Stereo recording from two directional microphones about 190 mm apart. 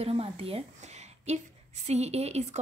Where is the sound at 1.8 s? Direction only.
35° right (ahead or behind).